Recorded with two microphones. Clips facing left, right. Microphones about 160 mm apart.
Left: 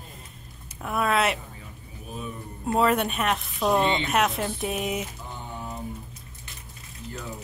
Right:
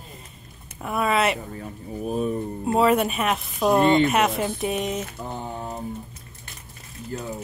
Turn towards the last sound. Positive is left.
turn(degrees=-45)  # may be behind; listen again after turning